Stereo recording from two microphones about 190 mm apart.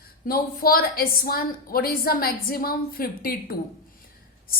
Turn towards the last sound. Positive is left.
turn(degrees=50)  # may be behind; listen again after turning